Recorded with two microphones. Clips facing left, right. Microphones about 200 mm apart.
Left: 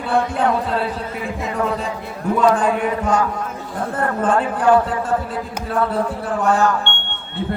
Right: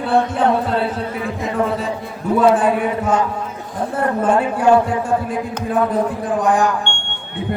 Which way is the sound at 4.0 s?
10° right (ahead or behind).